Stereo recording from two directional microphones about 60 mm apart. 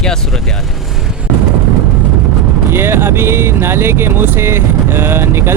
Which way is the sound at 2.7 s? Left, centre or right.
Right.